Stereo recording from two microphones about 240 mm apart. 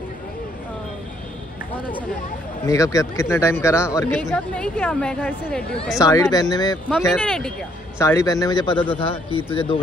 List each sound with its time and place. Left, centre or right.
2.6 s speech: centre
5.9 s speech: centre